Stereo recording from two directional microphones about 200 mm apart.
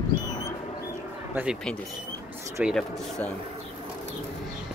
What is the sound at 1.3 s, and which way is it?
Speech, 5° right (ahead or behind).